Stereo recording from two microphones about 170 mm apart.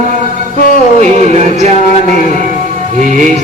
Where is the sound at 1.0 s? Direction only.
40° right (ahead or behind).